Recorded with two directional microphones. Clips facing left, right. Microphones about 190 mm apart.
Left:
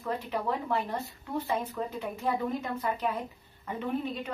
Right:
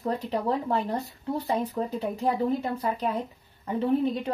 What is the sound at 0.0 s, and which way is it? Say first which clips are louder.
Speech: right 4 dB; 35° right (ahead or behind).